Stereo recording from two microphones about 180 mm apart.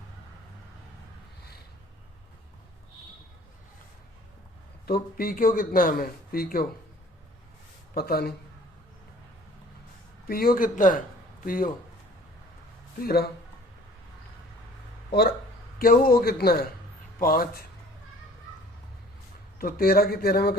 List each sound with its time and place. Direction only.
4.9 s speech: 55° left (ahead or behind)
7.9 s a man's voice: 60° left (ahead or behind)
10.2 s speech: 55° left (ahead or behind)
13.0 s a man's voice: 60° left (ahead or behind)
15.8 s a man's voice: 55° left (ahead or behind)
19.5 s a man's voice: 55° left (ahead or behind)